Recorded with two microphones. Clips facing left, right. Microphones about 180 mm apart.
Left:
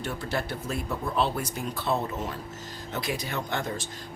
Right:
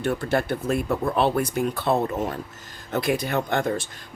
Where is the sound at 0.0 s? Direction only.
55° right (ahead or behind).